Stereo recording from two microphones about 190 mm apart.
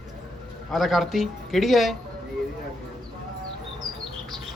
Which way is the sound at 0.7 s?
Centre (ahead or behind).